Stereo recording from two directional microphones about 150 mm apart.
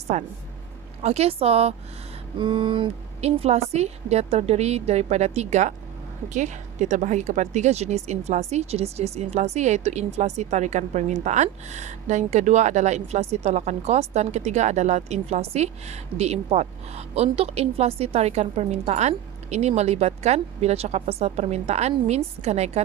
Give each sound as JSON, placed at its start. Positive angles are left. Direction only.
{"t": 0.1, "sound": "a woman's voice", "side_deg": -50}